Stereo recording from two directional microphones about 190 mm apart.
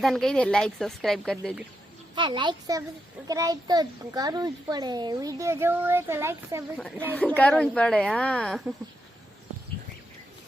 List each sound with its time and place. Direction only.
0.0 s speech: centre (ahead or behind)
2.1 s a child's voice: 25° right (ahead or behind)
7.1 s speech: 10° left (ahead or behind)